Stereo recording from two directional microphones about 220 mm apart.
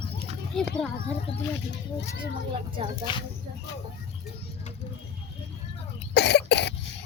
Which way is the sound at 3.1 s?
20° left (ahead or behind).